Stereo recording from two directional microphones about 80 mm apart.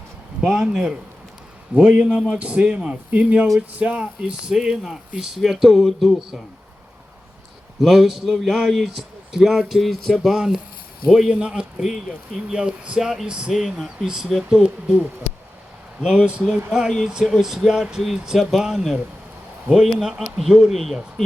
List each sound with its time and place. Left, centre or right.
0.4 s speech: centre
7.8 s a man's voice: centre
13.5 s a man's voice: centre
16.0 s a man's voice: centre